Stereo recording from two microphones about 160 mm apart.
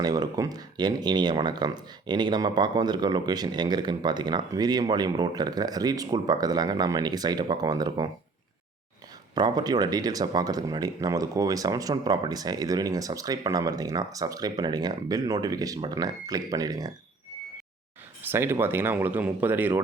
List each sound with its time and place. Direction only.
0.0 s speech: 25° right (ahead or behind)
9.3 s speech: 25° right (ahead or behind)
18.2 s speech: 15° right (ahead or behind)